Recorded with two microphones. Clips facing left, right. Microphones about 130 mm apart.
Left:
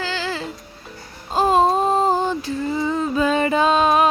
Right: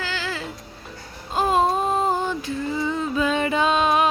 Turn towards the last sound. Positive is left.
turn(degrees=40)  # may be behind; listen again after turning